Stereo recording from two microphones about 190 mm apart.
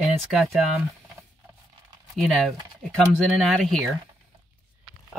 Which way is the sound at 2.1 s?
Centre (ahead or behind).